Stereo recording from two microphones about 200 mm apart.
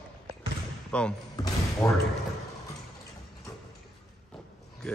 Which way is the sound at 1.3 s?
20° left (ahead or behind).